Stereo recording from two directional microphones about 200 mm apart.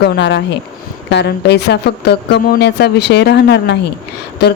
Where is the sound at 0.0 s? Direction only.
60° left (ahead or behind).